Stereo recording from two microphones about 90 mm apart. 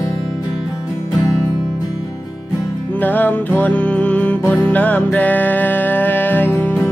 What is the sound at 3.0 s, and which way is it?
Music, 20° left (ahead or behind).